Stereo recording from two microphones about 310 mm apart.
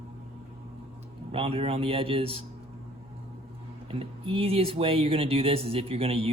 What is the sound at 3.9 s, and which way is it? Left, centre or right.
Speech, centre.